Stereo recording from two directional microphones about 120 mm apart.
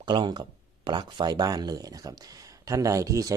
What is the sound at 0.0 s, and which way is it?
Speech, 40° right (ahead or behind).